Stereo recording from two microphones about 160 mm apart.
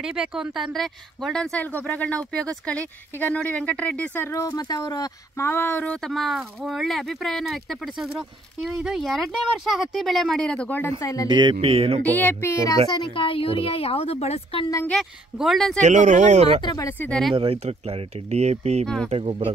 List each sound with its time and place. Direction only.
0.0 s a woman's voice: 5° right (ahead or behind); by 11.2 s 20° left (ahead or behind)
11.2 s speech: 30° right (ahead or behind)
12.0 s speech: 10° left (ahead or behind)
12.9 s a woman's voice: 30° left (ahead or behind)
14.9 s a woman's voice: centre (ahead or behind)
15.8 s speech: 50° right (ahead or behind)
16.6 s speech: 20° left (ahead or behind)
17.3 s speech: 35° right (ahead or behind)